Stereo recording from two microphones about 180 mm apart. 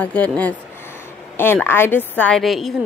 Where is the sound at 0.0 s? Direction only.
10° left (ahead or behind).